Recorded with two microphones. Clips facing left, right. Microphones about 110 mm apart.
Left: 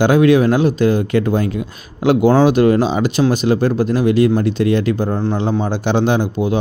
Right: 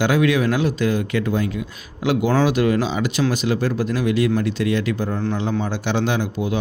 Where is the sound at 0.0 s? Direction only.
45° left (ahead or behind).